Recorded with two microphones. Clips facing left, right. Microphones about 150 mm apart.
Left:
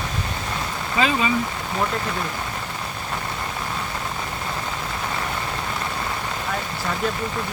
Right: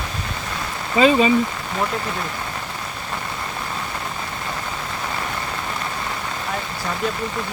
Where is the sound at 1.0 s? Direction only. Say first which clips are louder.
Right 7 dB; 25° right (ahead or behind).